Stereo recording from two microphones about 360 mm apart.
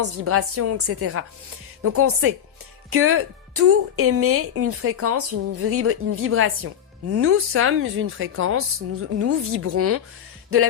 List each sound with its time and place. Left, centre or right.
0.0 s a woman's voice: right